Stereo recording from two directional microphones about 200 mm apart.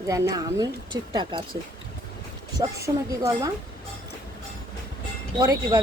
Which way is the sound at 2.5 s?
15° right (ahead or behind).